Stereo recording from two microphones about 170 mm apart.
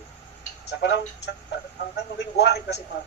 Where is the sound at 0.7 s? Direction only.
85° left.